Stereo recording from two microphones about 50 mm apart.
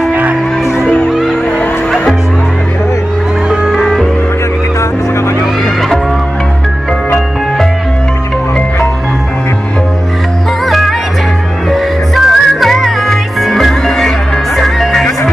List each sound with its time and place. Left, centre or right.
0.1 s music: right
1.0 s music: centre
10.6 s music: centre